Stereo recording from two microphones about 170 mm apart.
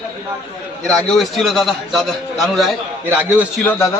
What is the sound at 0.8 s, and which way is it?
A man's voice, centre (ahead or behind).